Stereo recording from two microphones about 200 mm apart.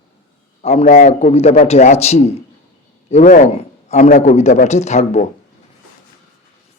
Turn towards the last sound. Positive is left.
turn(degrees=35)  # may be behind; listen again after turning